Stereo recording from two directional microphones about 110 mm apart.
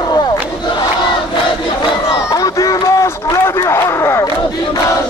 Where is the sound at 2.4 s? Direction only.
30° left (ahead or behind).